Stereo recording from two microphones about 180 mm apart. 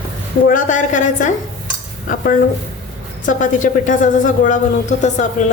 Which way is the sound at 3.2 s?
45° left (ahead or behind).